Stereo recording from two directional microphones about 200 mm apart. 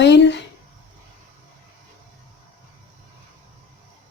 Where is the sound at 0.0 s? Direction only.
60° left (ahead or behind).